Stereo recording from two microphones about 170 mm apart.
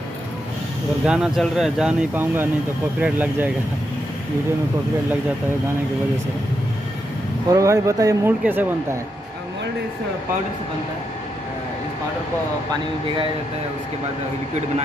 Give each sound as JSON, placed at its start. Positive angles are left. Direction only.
{"t": 1.0, "sound": "speech", "side_deg": -5}
{"t": 7.4, "sound": "speech", "side_deg": -20}